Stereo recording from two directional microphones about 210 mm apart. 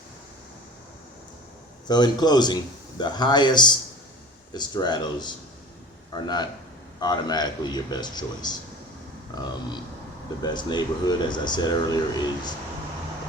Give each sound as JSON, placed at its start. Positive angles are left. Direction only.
{"t": 1.9, "sound": "a man's voice", "side_deg": 20}